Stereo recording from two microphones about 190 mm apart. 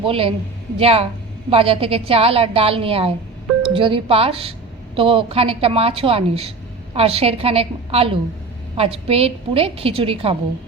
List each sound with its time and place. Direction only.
0.0 s a woman's voice: 30° right (ahead or behind)